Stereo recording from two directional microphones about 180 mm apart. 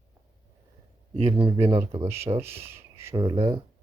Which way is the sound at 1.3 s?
30° right (ahead or behind).